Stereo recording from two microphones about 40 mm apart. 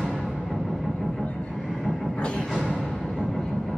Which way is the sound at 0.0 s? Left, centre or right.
Centre.